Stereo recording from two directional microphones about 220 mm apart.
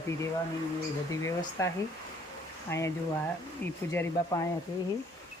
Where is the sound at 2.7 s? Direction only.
10° left (ahead or behind).